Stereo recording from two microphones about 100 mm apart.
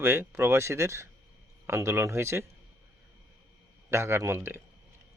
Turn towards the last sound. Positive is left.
turn(degrees=-25)  # may be behind; listen again after turning